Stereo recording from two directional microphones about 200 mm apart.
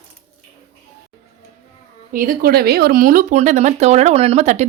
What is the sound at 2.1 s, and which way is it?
Speech, 45° right (ahead or behind).